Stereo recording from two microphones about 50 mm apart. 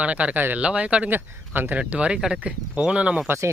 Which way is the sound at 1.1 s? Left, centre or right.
Right.